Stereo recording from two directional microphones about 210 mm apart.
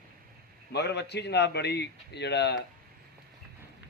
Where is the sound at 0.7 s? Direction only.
50° left (ahead or behind).